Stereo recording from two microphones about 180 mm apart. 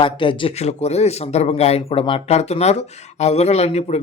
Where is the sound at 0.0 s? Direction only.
30° left (ahead or behind).